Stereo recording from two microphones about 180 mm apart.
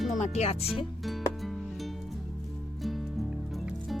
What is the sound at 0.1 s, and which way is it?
Speech, 40° left (ahead or behind).